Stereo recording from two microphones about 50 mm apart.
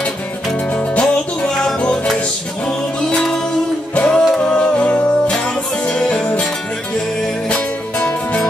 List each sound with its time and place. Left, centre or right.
0.7 s music: left
3.9 s music: centre
5.9 s music: centre